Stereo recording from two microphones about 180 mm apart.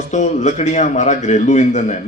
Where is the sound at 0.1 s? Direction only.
40° left (ahead or behind).